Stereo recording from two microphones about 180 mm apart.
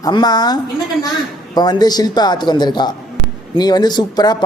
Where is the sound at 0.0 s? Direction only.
25° left (ahead or behind).